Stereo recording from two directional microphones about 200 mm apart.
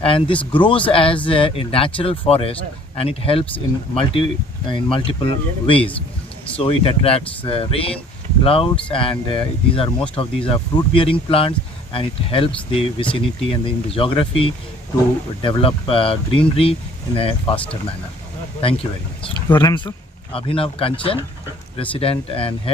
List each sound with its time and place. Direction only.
0.0 s speech: 25° left (ahead or behind)
18.6 s speech: 25° left (ahead or behind)